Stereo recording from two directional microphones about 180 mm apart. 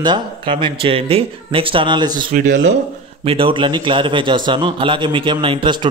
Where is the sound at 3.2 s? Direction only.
30° right (ahead or behind).